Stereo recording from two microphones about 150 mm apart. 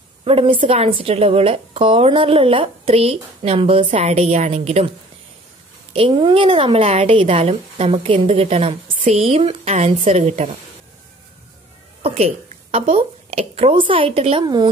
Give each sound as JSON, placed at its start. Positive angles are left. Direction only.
{"t": 0.2, "sound": "a woman's voice", "side_deg": -35}
{"t": 5.9, "sound": "a woman's voice", "side_deg": -35}
{"t": 12.0, "sound": "a woman's voice", "side_deg": -40}